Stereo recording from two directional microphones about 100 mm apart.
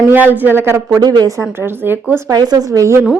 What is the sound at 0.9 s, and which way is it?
Speech, 40° right (ahead or behind).